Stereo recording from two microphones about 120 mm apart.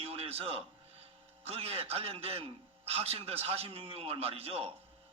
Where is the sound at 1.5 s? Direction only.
55° right (ahead or behind).